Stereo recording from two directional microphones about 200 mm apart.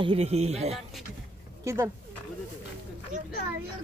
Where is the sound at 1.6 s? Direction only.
15° right (ahead or behind).